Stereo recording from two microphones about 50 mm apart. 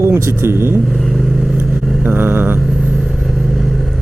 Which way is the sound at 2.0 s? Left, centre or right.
Right.